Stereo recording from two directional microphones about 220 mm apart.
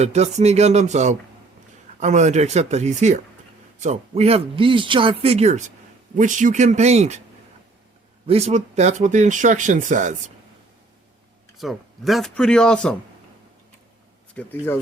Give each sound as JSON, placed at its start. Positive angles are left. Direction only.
{"t": 0.0, "sound": "speech", "side_deg": -30}
{"t": 8.3, "sound": "speech", "side_deg": -30}
{"t": 11.5, "sound": "speech", "side_deg": 0}
{"t": 14.4, "sound": "speech", "side_deg": 5}